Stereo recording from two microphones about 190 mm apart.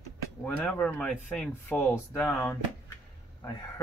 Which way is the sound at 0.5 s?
5° left (ahead or behind).